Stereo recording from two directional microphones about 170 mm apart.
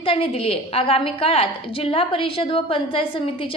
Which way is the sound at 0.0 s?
35° left (ahead or behind).